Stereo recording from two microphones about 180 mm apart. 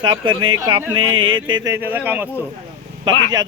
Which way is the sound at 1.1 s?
90° right.